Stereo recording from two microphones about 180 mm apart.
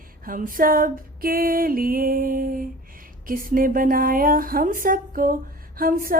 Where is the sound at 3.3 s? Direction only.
50° right (ahead or behind).